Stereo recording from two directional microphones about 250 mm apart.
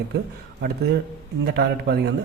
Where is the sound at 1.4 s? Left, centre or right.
Right.